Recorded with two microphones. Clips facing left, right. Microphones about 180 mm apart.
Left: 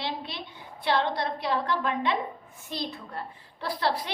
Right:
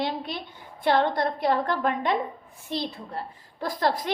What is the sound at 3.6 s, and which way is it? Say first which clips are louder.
Speech: right 3 dB; 45° right (ahead or behind).